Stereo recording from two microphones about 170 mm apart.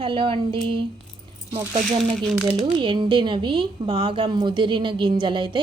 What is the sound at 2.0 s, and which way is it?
Speech, centre (ahead or behind).